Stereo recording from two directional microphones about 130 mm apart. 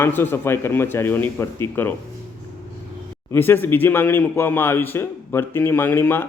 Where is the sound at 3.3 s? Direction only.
15° left (ahead or behind).